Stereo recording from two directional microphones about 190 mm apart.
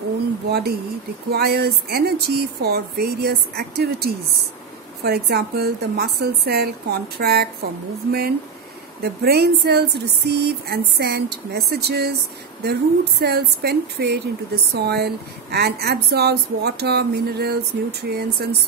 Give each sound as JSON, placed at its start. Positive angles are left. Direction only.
{"t": 0.5, "sound": "speech", "side_deg": -55}